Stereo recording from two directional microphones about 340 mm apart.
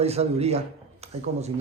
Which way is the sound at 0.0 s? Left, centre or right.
Centre.